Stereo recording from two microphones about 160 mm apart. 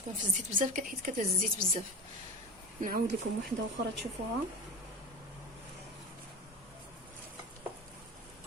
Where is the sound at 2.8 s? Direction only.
60° right (ahead or behind).